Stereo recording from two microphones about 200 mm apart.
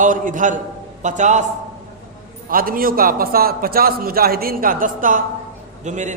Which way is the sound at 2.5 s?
45° right (ahead or behind).